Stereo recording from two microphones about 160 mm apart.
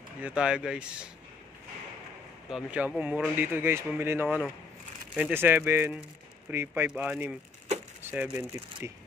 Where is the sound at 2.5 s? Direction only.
5° right (ahead or behind).